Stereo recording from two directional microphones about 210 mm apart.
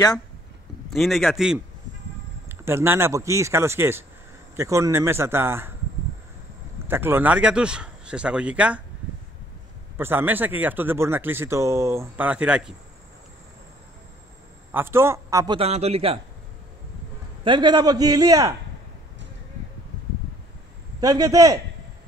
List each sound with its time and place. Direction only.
0.8 s speech: centre (ahead or behind)
6.9 s speech: 10° right (ahead or behind)
9.9 s speech: 10° right (ahead or behind)
14.7 s a man's voice: 10° right (ahead or behind); by 16.2 s 30° right (ahead or behind)
17.5 s a man's voice: 20° right (ahead or behind)
21.0 s speech: 15° right (ahead or behind)